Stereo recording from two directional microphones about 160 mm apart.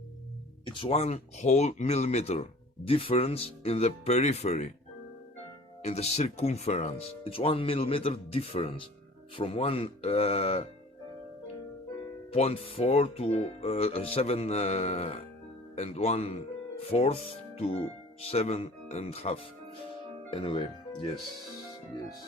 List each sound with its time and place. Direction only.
0.6 s speech: 30° left (ahead or behind)
5.8 s speech: 45° left (ahead or behind)
12.3 s speech: 40° left (ahead or behind)